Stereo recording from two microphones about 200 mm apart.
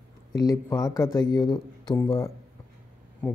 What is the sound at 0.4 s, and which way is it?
A man's voice, 15° left (ahead or behind).